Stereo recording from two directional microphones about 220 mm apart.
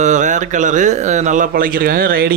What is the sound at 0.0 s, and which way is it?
Speech, 35° right (ahead or behind).